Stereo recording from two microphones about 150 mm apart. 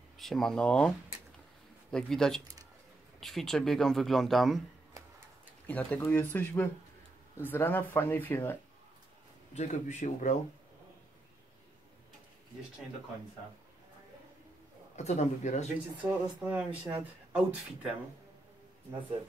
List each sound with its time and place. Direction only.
0.2 s speech: centre (ahead or behind)
5.7 s speech: 10° left (ahead or behind)
9.5 s speech: 50° left (ahead or behind)
15.0 s speech: 50° left (ahead or behind)
16.0 s speech: 10° right (ahead or behind)